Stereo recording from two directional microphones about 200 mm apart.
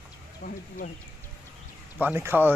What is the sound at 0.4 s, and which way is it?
Speech, 40° left (ahead or behind).